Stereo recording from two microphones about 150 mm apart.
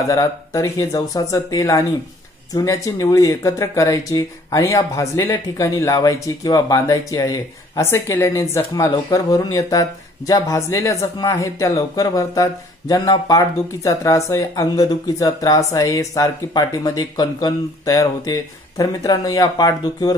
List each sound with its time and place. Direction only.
0.1 s speech: 25° left (ahead or behind)